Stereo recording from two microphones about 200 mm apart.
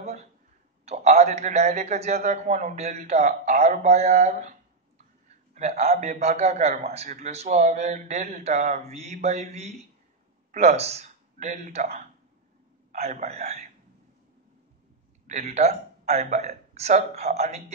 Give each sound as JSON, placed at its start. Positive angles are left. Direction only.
{"t": 0.0, "sound": "a sound", "side_deg": -35}
{"t": 0.8, "sound": "a man's voice", "side_deg": -35}
{"t": 15.2, "sound": "a man's voice", "side_deg": -35}